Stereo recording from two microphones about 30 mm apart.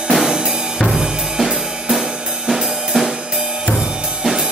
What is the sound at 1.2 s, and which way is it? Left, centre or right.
Drum kit, centre.